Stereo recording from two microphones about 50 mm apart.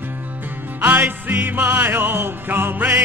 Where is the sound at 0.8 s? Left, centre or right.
Right.